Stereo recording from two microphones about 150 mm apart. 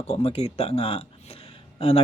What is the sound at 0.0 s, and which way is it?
Speech, 45° left (ahead or behind).